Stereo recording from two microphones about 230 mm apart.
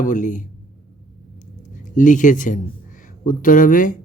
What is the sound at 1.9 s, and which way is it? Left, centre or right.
Speech, left.